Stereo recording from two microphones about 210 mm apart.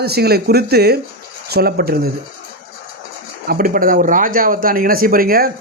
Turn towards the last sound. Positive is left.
turn(degrees=-45)  # may be behind; listen again after turning